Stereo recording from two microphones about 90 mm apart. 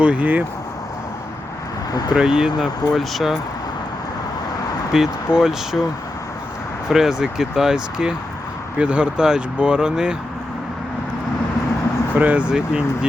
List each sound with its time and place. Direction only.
0.0 s speech: 15° right (ahead or behind)
2.1 s speech: 5° right (ahead or behind)
4.9 s speech: 5° right (ahead or behind)
6.8 s speech: 5° right (ahead or behind)
12.1 s speech: 15° right (ahead or behind)